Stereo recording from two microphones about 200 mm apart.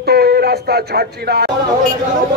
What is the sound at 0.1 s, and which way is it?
Speech, 50° right (ahead or behind).